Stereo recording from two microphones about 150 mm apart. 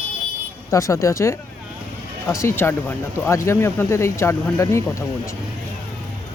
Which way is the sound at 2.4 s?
15° left (ahead or behind).